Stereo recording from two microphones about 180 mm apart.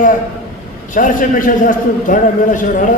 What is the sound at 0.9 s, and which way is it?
A man's voice, 50° left (ahead or behind).